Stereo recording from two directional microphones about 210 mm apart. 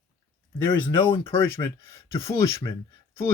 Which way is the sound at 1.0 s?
25° left (ahead or behind).